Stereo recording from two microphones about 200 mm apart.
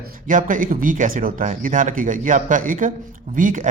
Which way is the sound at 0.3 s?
40° right (ahead or behind).